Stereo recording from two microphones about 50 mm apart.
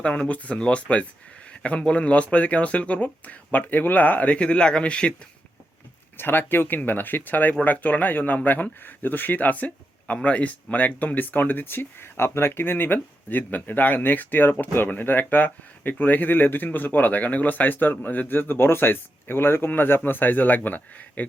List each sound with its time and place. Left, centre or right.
0.3 s speech: left
4.4 s speech: left
6.1 s speech: left